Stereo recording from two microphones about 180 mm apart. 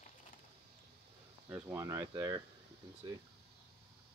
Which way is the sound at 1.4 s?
10° right (ahead or behind).